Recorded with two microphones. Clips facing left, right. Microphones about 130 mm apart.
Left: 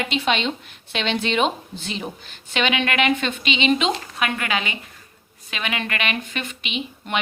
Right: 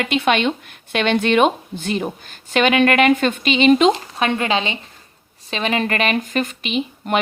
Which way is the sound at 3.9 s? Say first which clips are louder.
Right 6 dB; 30° right (ahead or behind).